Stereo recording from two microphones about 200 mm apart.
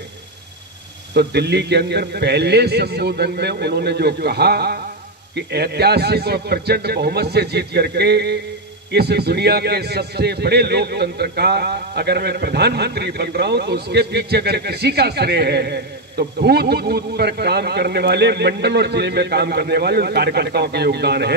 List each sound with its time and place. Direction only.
1.1 s a man's voice: 55° right (ahead or behind)